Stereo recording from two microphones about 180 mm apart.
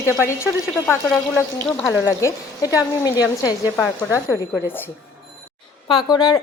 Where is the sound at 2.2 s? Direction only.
20° left (ahead or behind).